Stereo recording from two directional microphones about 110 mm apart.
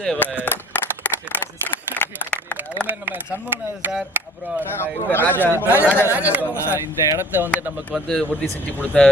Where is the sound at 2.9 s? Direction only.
15° right (ahead or behind).